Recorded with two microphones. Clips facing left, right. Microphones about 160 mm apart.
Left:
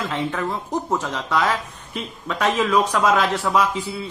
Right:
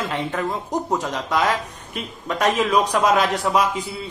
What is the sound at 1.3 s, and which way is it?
Speech, 40° right (ahead or behind).